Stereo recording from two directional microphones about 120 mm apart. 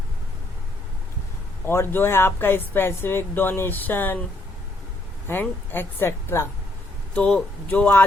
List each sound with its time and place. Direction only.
1.6 s speech: 20° left (ahead or behind)
5.3 s speech: 20° left (ahead or behind)
7.1 s speech: 5° left (ahead or behind)